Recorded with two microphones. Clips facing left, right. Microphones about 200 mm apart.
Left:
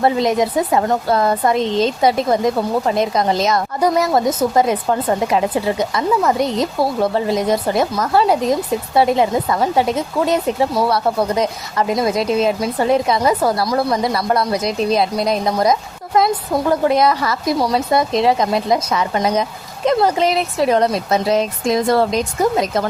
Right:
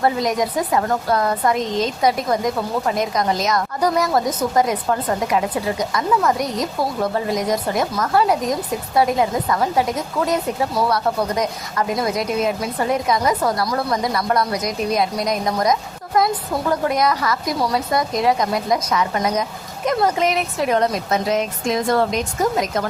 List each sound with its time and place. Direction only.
0.0 s speech: 25° left (ahead or behind)